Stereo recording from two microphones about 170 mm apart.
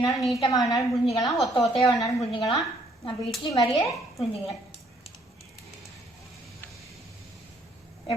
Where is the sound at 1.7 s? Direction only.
30° left (ahead or behind).